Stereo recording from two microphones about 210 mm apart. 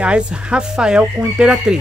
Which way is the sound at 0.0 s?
5° right (ahead or behind).